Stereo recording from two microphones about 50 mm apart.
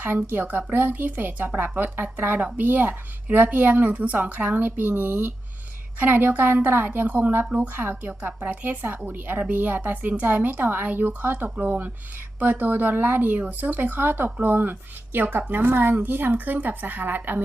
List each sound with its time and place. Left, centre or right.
0.0 s a woman's voice: right